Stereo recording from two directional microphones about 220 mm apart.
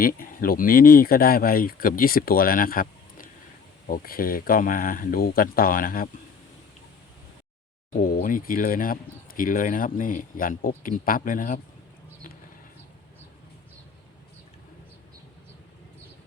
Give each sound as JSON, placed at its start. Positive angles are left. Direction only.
{"t": 0.0, "sound": "speech", "side_deg": 40}
{"t": 8.0, "sound": "speech", "side_deg": 40}